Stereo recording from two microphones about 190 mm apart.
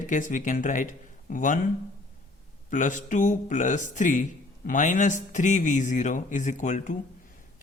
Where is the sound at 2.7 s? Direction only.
40° left (ahead or behind).